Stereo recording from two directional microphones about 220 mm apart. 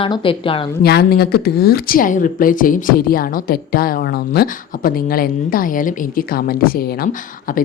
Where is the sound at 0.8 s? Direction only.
45° left (ahead or behind).